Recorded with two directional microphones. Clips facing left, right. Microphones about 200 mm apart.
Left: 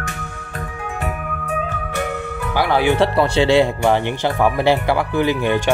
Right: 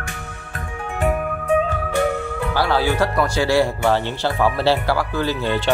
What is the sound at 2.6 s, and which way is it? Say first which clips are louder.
Speech: left 3 dB; 15° left (ahead or behind).